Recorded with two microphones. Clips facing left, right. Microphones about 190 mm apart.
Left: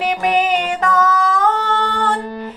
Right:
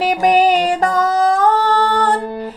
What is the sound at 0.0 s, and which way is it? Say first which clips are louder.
Music: right 4 dB; 35° right (ahead or behind).